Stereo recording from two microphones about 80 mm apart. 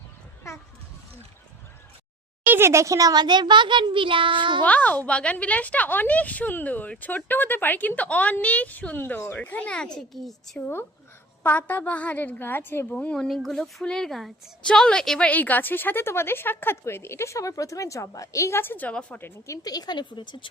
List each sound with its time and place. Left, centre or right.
2.5 s a child's voice: right
4.6 s a woman's voice: centre
11.4 s a woman's voice: left
12.9 s speech: centre
13.2 s a woman's voice: centre
15.3 s a woman's voice: left
18.9 s speech: centre
19.6 s speech: left